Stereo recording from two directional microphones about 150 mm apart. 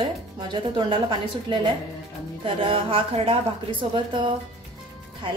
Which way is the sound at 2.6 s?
35° right (ahead or behind).